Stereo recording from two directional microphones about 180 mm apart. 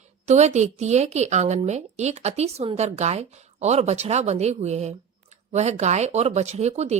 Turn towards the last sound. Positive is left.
turn(degrees=-35)  # may be behind; listen again after turning